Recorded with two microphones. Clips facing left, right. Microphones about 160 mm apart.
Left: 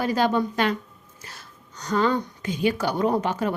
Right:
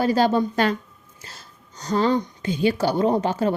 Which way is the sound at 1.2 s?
25° right (ahead or behind).